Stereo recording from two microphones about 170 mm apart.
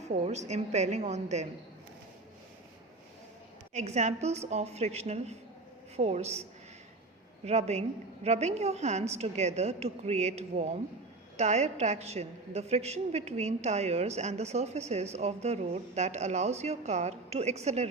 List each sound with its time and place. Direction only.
0.1 s a woman's voice: 40° right (ahead or behind)
3.8 s a woman's voice: 40° right (ahead or behind)
7.4 s a woman's voice: 40° right (ahead or behind)